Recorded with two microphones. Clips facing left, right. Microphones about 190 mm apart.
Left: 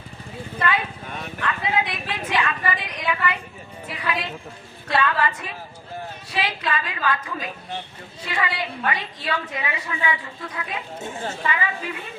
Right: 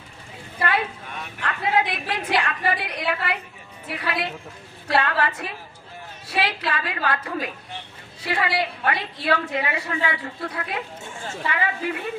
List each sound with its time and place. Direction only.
1.5 s a sound: 70° right (ahead or behind)
3.8 s a woman's voice: 65° right (ahead or behind)
11.0 s speech: 40° left (ahead or behind)
11.5 s a woman's voice: 65° right (ahead or behind)